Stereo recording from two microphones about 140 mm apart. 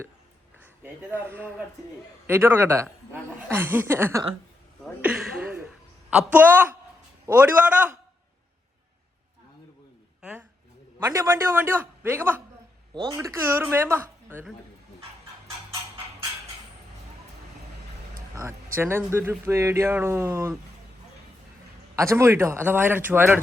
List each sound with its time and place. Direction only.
0.8 s speech: 15° right (ahead or behind)
6.1 s speech: 10° right (ahead or behind)
10.2 s a sound: 10° right (ahead or behind)
11.0 s speech: 20° right (ahead or behind)
12.9 s a woman's voice: 35° right (ahead or behind)
13.1 s speech: 15° right (ahead or behind)
18.8 s speech: 15° right (ahead or behind)
21.9 s speech: 20° right (ahead or behind)